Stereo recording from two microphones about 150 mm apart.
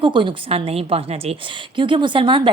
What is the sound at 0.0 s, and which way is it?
A woman's voice, 35° right (ahead or behind).